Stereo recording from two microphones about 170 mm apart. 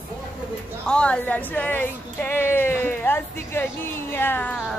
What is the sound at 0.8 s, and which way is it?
A woman's voice, 5° left (ahead or behind).